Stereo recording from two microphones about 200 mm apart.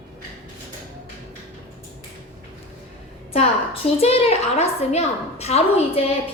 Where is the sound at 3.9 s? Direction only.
30° left (ahead or behind).